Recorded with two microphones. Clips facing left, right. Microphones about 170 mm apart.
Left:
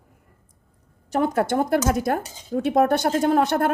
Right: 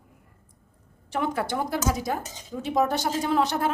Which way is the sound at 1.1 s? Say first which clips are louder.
Left 6 dB; 40° left (ahead or behind).